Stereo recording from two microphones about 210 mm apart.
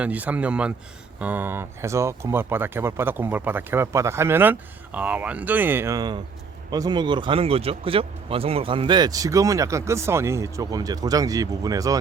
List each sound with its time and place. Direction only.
0.0 s speech: 5° right (ahead or behind)